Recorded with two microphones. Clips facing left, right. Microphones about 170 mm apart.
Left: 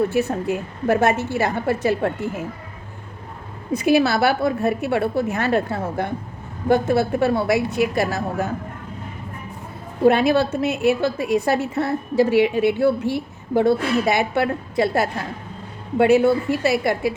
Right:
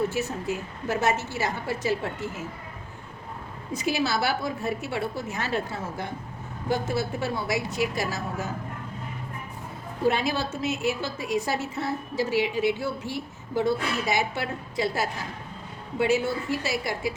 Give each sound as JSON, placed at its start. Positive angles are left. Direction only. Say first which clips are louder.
{"t": 0.1, "sound": "a woman's voice", "louder": "left 8 dB", "side_deg": 60}
{"t": 3.7, "sound": "a woman's voice", "louder": "left 9 dB", "side_deg": 60}
{"t": 10.0, "sound": "a woman's voice", "louder": "left 9 dB", "side_deg": 60}